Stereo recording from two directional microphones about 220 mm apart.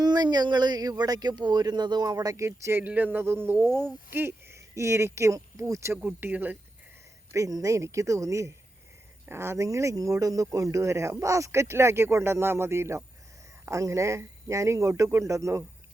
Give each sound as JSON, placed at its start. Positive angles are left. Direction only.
{"t": 0.0, "sound": "speech", "side_deg": -20}
{"t": 3.7, "sound": "speech", "side_deg": 5}
{"t": 4.1, "sound": "speech", "side_deg": -10}